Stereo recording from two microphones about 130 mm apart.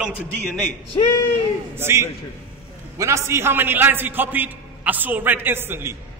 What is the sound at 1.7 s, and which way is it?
A man's voice, 20° right (ahead or behind).